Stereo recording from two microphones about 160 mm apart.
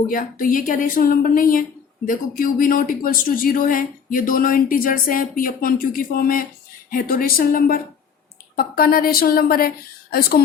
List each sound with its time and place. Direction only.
0.1 s a woman's voice: 65° left (ahead or behind)